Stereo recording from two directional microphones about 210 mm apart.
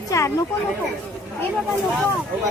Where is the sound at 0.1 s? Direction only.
15° left (ahead or behind).